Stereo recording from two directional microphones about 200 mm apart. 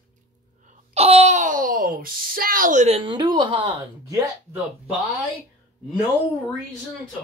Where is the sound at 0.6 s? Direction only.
30° right (ahead or behind).